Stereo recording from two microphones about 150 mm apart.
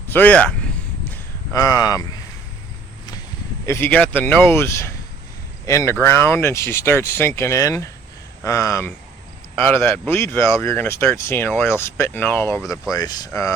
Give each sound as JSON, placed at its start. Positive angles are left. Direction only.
{"t": 0.1, "sound": "speech", "side_deg": 10}
{"t": 1.5, "sound": "speech", "side_deg": 25}
{"t": 3.7, "sound": "speech", "side_deg": 15}